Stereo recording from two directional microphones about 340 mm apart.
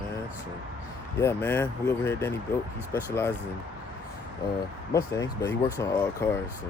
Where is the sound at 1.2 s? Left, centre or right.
Centre.